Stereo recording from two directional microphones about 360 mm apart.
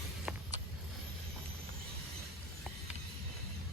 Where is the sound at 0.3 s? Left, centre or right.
Centre.